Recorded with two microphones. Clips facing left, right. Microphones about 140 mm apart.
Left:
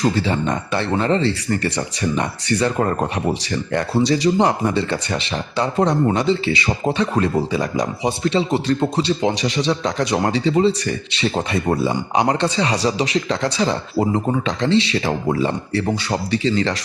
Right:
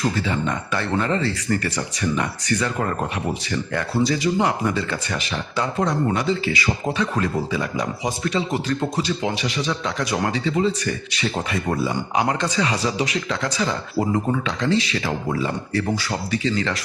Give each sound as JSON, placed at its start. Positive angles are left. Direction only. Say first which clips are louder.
{"t": 0.0, "sound": "speech", "louder": "left 4 dB", "side_deg": 30}